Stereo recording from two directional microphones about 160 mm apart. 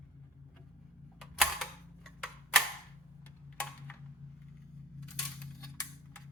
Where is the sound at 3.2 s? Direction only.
10° left (ahead or behind).